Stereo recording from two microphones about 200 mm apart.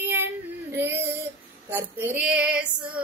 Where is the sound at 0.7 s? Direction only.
10° right (ahead or behind).